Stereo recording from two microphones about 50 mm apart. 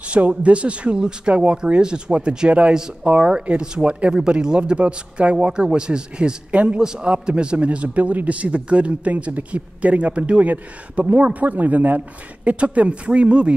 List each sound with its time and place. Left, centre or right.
0.1 s a man's voice: right